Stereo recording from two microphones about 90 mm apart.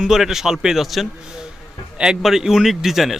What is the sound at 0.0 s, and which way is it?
Speech, 5° right (ahead or behind).